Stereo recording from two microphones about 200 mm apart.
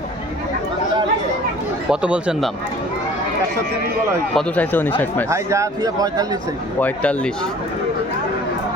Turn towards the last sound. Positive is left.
turn(degrees=5)  # may be behind; listen again after turning